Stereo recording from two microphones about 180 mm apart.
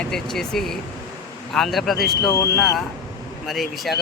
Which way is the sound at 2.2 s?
15° left (ahead or behind).